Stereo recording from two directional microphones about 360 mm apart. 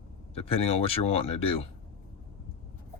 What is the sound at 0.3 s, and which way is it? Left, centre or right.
Speech, centre.